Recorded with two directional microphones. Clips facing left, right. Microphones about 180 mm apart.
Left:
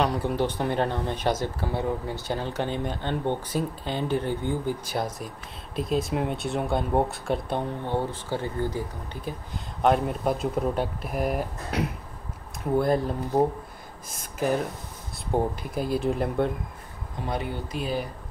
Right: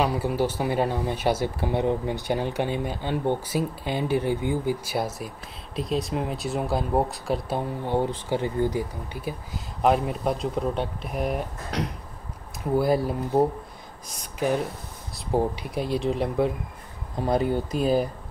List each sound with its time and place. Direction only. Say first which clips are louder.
0.0 s speech: right 1 dB; 5° right (ahead or behind)
17.3 s speech: right 7 dB; 40° right (ahead or behind)